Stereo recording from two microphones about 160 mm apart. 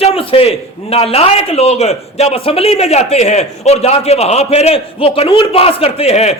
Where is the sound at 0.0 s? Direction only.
35° left (ahead or behind).